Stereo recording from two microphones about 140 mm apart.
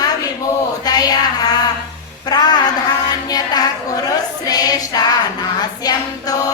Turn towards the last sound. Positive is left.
turn(degrees=25)  # may be behind; listen again after turning